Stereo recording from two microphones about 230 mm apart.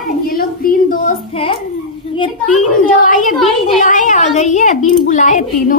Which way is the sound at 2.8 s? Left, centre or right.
Left.